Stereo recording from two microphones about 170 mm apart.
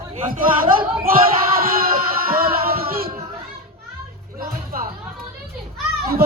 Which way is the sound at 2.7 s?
60° right (ahead or behind).